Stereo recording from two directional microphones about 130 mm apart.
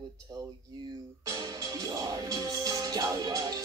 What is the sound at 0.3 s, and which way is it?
Speech, 30° right (ahead or behind).